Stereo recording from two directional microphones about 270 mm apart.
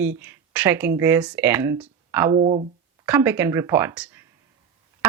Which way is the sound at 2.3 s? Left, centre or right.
Right.